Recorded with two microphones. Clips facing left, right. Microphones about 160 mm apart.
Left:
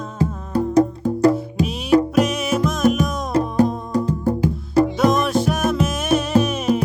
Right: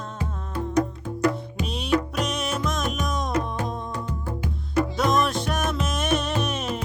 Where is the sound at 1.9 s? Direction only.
40° left (ahead or behind).